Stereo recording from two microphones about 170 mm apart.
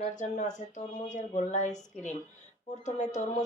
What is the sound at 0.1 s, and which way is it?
A woman's voice, 45° left (ahead or behind).